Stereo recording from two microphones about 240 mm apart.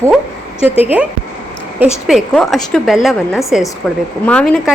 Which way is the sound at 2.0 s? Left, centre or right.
Centre.